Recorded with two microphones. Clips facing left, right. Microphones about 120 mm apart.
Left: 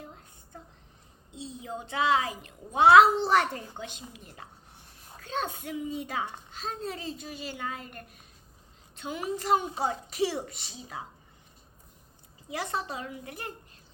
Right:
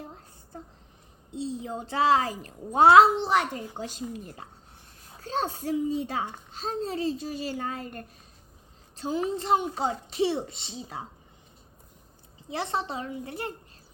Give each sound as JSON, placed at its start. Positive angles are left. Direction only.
{"t": 0.0, "sound": "a sound", "side_deg": -30}
{"t": 1.3, "sound": "a child's voice", "side_deg": -30}
{"t": 3.2, "sound": "a child's voice", "side_deg": -15}
{"t": 3.8, "sound": "a child's voice", "side_deg": -40}
{"t": 12.5, "sound": "a woman's voice", "side_deg": -25}